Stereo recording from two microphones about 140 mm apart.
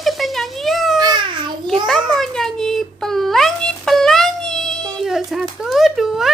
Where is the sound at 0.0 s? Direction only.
Centre (ahead or behind).